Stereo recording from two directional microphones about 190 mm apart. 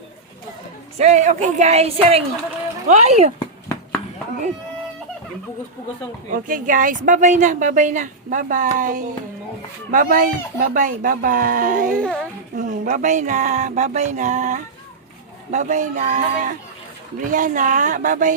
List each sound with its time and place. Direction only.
0.9 s speech: 35° right (ahead or behind)
6.3 s speech: 45° right (ahead or behind)
11.9 s speech: 5° left (ahead or behind)
12.5 s speech: 40° right (ahead or behind)